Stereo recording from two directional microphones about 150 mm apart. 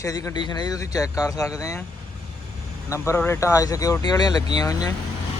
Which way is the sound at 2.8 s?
20° left (ahead or behind).